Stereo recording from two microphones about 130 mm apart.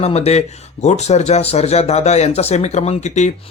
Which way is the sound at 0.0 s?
55° left (ahead or behind).